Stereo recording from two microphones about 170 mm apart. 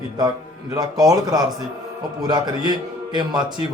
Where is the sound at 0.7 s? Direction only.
20° right (ahead or behind).